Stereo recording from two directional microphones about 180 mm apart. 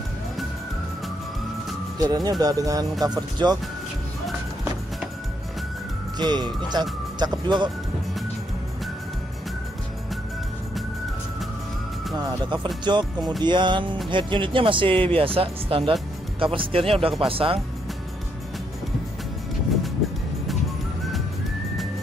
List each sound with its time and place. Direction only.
2.0 s speech: 20° right (ahead or behind)
6.1 s speech: 25° right (ahead or behind)
12.2 s speech: 20° right (ahead or behind)